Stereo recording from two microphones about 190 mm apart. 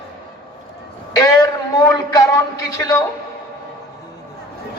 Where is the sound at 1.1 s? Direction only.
20° left (ahead or behind).